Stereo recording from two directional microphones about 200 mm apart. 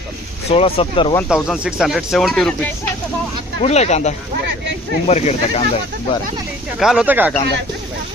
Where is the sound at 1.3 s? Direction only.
Centre (ahead or behind).